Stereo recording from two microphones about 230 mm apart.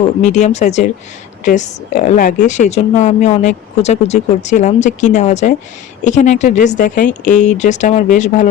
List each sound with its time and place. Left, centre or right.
0.2 s a woman's voice: left